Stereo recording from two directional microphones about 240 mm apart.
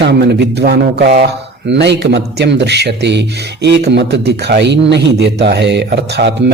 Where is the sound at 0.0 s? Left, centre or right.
Right.